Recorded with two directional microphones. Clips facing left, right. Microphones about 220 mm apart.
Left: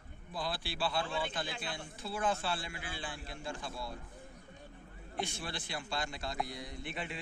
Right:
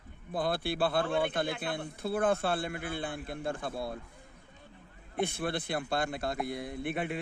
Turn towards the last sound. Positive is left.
turn(degrees=-55)  # may be behind; listen again after turning